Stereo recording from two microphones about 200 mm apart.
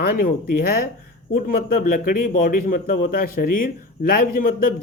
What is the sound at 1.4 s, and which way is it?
Speech, 45° left (ahead or behind).